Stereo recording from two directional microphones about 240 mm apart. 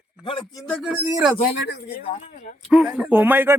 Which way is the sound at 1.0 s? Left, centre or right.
Centre.